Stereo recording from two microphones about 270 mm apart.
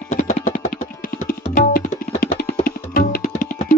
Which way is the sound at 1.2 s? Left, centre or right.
Left.